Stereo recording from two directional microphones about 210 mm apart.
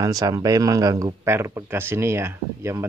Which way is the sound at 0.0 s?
15° right (ahead or behind).